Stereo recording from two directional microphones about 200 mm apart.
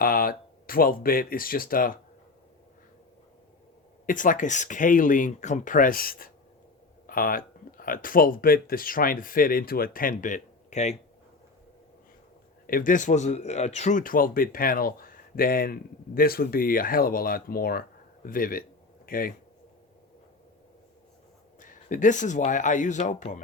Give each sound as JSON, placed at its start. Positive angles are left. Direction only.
{"t": 0.0, "sound": "speech", "side_deg": 45}
{"t": 4.0, "sound": "speech", "side_deg": 40}
{"t": 12.6, "sound": "speech", "side_deg": 45}
{"t": 21.6, "sound": "speech", "side_deg": 40}